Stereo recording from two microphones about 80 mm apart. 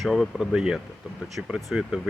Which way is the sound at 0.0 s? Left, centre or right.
Centre.